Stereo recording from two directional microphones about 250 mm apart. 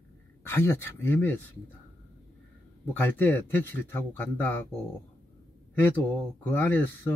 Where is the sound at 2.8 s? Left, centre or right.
Centre.